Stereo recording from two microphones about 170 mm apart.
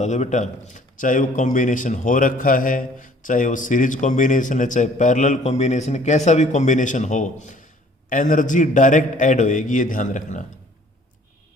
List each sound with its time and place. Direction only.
0.0 s a man's voice: 45° left (ahead or behind)